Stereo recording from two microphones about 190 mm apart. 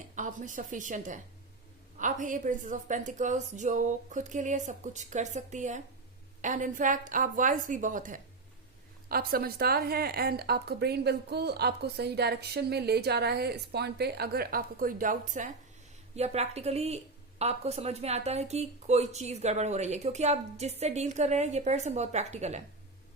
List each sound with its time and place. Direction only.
0.2 s a woman's voice: 40° right (ahead or behind)